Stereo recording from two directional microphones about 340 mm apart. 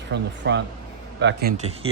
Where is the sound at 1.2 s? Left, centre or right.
Right.